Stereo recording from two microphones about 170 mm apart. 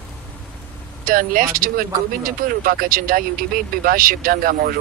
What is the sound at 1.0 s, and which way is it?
Speech, 55° right (ahead or behind).